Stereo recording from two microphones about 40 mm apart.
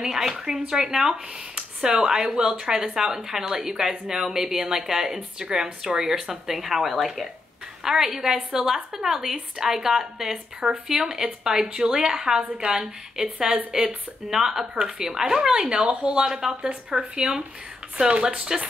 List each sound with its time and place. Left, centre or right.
0.0 s a woman's voice: centre